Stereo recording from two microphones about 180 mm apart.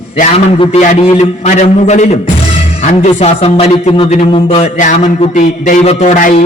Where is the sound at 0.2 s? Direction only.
35° left (ahead or behind).